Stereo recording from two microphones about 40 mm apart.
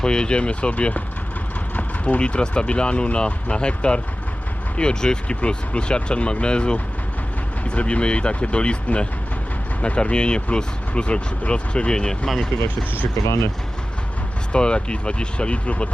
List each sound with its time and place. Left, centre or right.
0.0 s speech: left
14.5 s speech: left